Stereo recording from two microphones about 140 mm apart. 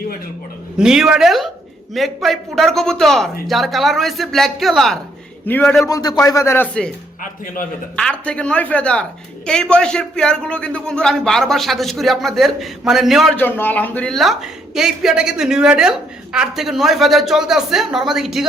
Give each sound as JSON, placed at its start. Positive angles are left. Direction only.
{"t": 0.8, "sound": "speech", "side_deg": -5}
{"t": 5.5, "sound": "speech", "side_deg": 15}
{"t": 5.8, "sound": "speech", "side_deg": 25}
{"t": 7.9, "sound": "speech", "side_deg": 5}
{"t": 13.3, "sound": "speech", "side_deg": 15}